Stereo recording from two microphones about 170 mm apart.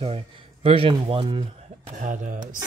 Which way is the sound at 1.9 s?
50° right (ahead or behind).